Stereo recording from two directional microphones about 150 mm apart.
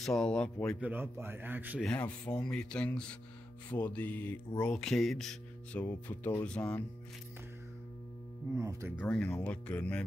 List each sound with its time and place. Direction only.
0.0 s speech: 5° left (ahead or behind)
0.7 s a man's voice: 10° right (ahead or behind)
1.8 s speech: 5° left (ahead or behind)
8.5 s speech: 20° right (ahead or behind)
9.0 s speech: 10° left (ahead or behind)